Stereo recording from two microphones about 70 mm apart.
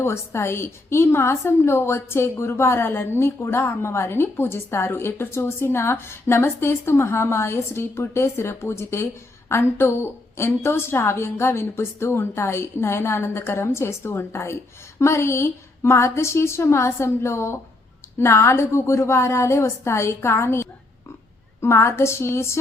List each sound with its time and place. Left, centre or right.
0.0 s a woman's voice: left